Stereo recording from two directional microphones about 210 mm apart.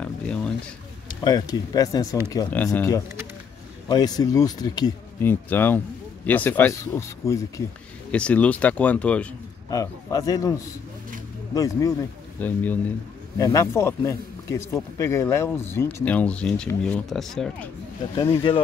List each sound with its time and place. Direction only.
0.0 s a sound: 5° left (ahead or behind)
1.0 s speech: 20° left (ahead or behind)
11.5 s speech: 15° left (ahead or behind)
18.1 s speech: 20° left (ahead or behind)